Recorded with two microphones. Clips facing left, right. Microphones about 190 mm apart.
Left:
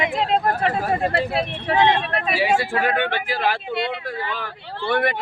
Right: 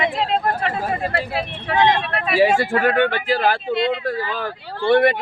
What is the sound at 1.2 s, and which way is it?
Speech, 30° left (ahead or behind).